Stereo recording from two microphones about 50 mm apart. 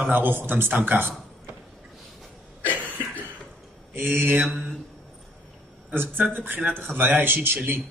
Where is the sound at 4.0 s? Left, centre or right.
Right.